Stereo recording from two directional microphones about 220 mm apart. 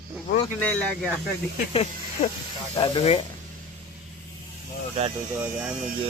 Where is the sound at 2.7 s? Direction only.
15° left (ahead or behind).